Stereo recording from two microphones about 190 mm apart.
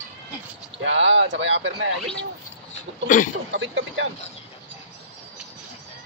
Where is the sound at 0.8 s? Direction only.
80° right.